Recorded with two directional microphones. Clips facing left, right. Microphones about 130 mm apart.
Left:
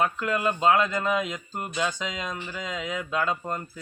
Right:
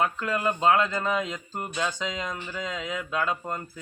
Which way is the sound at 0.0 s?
20° left (ahead or behind).